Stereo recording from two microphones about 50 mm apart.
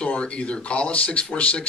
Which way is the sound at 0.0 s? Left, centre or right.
Left.